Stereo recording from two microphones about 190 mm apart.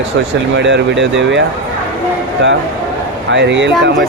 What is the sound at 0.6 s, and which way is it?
Speech, 70° right (ahead or behind).